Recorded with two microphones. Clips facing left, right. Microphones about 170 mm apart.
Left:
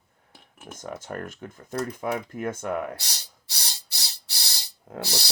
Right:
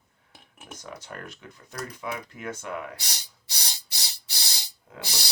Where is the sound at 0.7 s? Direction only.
50° left (ahead or behind).